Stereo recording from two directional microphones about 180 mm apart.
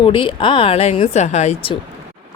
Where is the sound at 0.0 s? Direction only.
30° left (ahead or behind).